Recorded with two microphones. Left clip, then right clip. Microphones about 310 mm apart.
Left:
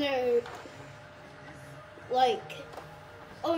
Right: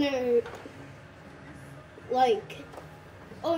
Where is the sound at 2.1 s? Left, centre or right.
Centre.